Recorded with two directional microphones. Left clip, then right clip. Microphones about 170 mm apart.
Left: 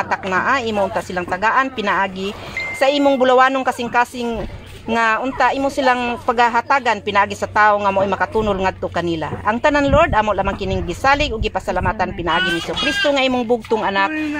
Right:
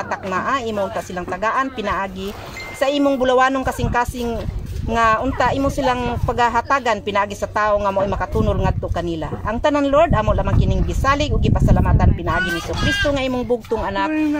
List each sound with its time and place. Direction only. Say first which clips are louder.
0.1 s speech: left 3 dB; 35° left (ahead or behind)